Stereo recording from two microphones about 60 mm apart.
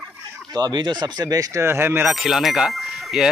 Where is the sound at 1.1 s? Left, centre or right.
Right.